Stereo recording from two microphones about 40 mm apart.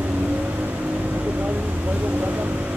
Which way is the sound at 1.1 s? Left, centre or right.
Right.